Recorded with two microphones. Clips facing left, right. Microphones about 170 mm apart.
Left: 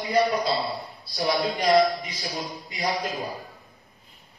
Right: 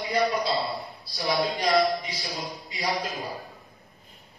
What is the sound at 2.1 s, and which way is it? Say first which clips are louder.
Speech: left 2 dB; centre (ahead or behind).